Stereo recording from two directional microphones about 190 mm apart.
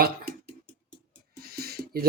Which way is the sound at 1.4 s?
55° right (ahead or behind).